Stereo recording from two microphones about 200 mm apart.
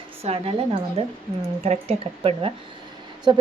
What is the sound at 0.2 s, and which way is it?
A woman's voice, 30° right (ahead or behind).